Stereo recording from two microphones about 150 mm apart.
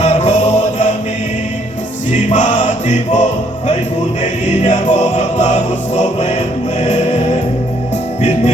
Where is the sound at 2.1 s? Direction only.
55° left (ahead or behind).